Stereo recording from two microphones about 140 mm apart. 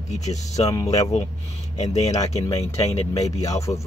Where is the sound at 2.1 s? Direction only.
25° left (ahead or behind).